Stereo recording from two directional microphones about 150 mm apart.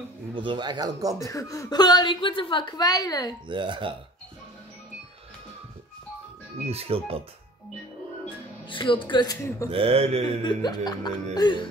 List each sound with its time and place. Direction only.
0.3 s speech: 35° right (ahead or behind)
1.2 s a woman's voice: 20° left (ahead or behind)
3.4 s speech: 30° right (ahead or behind)
6.7 s speech: 40° right (ahead or behind)
8.6 s speech: 35° left (ahead or behind)
9.7 s speech: 40° right (ahead or behind)
10.4 s a woman's voice: 30° left (ahead or behind)